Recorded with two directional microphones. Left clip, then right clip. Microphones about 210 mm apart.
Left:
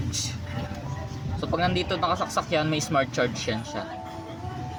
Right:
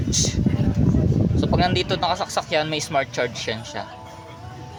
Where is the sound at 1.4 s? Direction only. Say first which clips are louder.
Right 3 dB; 35° right (ahead or behind).